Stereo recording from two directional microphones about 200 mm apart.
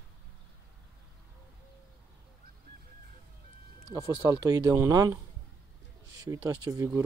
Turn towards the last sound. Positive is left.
turn(degrees=-15)  # may be behind; listen again after turning